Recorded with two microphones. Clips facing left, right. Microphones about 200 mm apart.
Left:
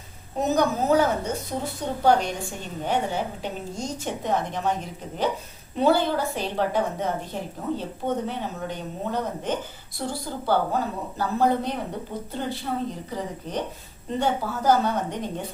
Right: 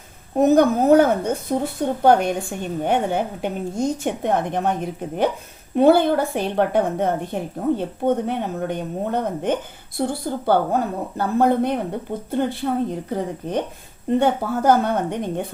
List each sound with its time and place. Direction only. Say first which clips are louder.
0.3 s a woman's voice: right 8 dB; 55° right (ahead or behind)